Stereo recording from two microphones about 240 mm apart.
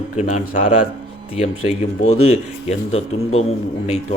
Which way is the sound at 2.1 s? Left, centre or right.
Left.